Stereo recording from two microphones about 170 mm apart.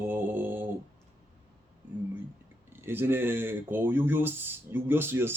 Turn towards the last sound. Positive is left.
turn(degrees=-15)  # may be behind; listen again after turning